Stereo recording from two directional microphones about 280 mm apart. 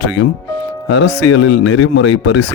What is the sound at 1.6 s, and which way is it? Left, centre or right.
Speech, left.